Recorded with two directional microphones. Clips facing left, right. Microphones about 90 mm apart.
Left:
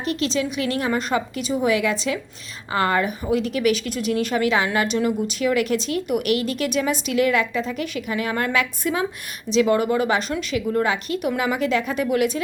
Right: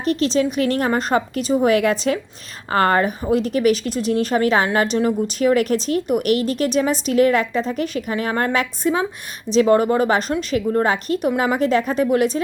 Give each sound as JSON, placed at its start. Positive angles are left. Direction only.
{"t": 0.0, "sound": "a woman's voice", "side_deg": -40}